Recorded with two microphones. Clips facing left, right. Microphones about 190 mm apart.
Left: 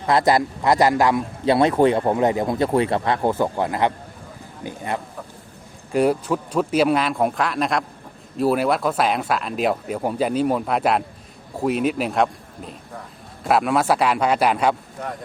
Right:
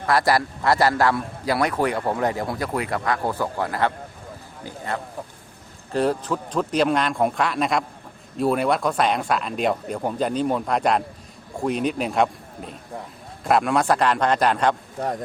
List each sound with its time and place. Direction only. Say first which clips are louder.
0.0 s a man's voice: left 2 dB; 20° left (ahead or behind)